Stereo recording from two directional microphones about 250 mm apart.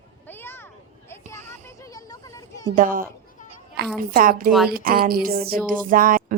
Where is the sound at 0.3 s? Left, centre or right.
Centre.